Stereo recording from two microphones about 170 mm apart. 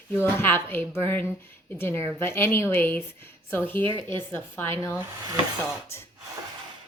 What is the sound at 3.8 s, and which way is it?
Speech, 30° right (ahead or behind).